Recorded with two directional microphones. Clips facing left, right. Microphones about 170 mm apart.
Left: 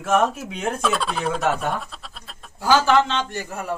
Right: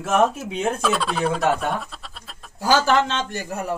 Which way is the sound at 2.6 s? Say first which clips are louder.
Left 1 dB; 40° right (ahead or behind).